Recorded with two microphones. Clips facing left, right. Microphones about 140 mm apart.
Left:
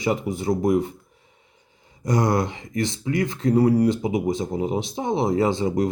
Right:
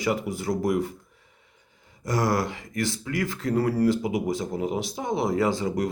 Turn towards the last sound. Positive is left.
turn(degrees=25)  # may be behind; listen again after turning